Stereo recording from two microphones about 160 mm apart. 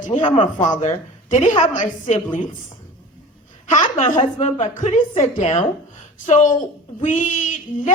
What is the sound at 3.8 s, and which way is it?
A woman's voice, 50° left (ahead or behind).